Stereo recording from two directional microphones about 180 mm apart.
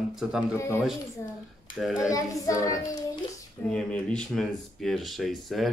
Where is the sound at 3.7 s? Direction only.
5° left (ahead or behind).